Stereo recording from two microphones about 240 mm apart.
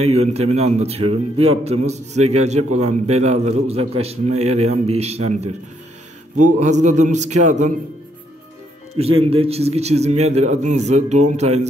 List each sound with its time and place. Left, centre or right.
0.0 s a man's voice: right
8.9 s a man's voice: right